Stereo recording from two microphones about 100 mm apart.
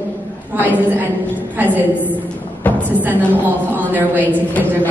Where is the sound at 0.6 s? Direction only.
20° right (ahead or behind).